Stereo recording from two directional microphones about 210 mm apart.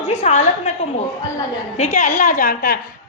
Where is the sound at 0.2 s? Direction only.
35° left (ahead or behind).